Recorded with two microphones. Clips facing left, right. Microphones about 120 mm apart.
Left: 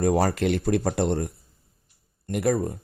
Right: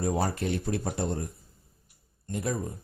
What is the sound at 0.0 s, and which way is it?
Speech, 80° left.